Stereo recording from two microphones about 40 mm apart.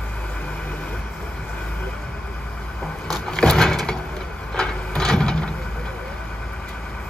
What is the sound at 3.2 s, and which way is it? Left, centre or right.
Vehicle, centre.